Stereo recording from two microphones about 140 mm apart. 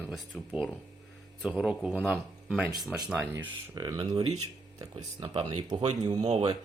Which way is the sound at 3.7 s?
25° right (ahead or behind).